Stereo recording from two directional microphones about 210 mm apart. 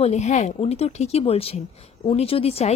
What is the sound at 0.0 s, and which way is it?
A woman's voice, 30° left (ahead or behind).